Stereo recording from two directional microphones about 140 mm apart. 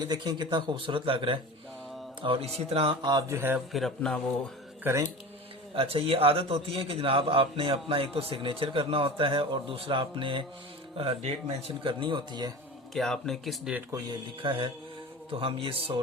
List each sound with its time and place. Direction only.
0.0 s a man's voice: 30° right (ahead or behind); by 2.9 s 45° right (ahead or behind)
3.0 s speech: 30° right (ahead or behind)
3.7 s speech: centre (ahead or behind)
4.8 s speech: 20° right (ahead or behind)
5.7 s a man's voice: 40° right (ahead or behind)
12.9 s speech: centre (ahead or behind)
14.4 s a man's voice: 40° right (ahead or behind)